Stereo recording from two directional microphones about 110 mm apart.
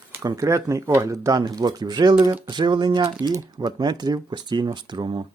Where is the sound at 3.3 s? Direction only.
35° right (ahead or behind).